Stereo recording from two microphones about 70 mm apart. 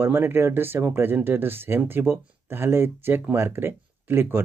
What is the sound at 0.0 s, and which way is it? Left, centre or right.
Speech, right.